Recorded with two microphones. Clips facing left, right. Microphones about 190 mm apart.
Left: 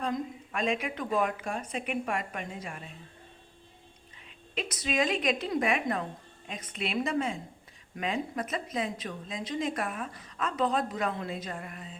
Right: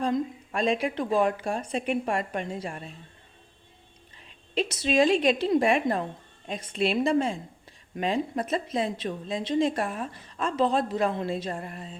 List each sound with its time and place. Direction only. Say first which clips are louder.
0.0 s a woman's voice: right 6 dB; 35° right (ahead or behind)
4.5 s a woman's voice: right 7 dB; 30° right (ahead or behind)